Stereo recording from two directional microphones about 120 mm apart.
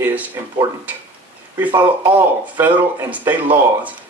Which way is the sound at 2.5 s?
15° right (ahead or behind).